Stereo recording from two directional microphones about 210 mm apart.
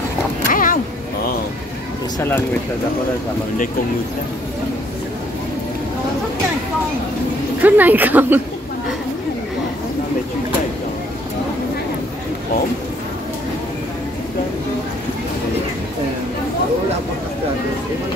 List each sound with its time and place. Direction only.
0.5 s a sound: 40° left (ahead or behind)
2.1 s speech: 10° left (ahead or behind)
7.6 s speech: 10° right (ahead or behind)